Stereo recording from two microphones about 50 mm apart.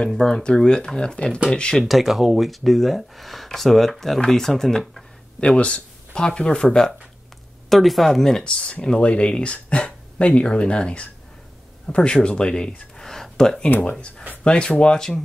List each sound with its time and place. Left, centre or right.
0.0 s speech: centre
1.9 s speech: centre
5.4 s speech: left
7.7 s speech: centre
8.5 s speech: centre
12.9 s a sound: centre
13.9 s speech: centre